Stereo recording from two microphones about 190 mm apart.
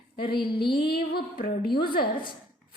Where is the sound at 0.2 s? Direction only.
55° left (ahead or behind).